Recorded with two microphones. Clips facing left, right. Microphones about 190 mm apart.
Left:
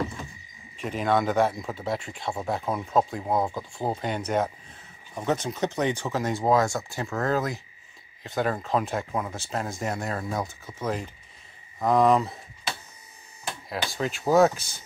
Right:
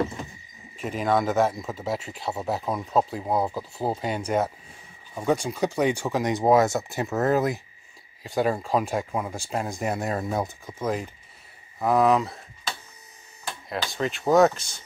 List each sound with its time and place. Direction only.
0.7 s speech: 5° right (ahead or behind)